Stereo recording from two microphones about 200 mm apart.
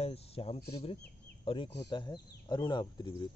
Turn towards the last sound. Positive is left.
turn(degrees=25)  # may be behind; listen again after turning